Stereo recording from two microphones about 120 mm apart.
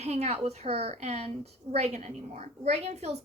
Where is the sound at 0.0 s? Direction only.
60° right (ahead or behind).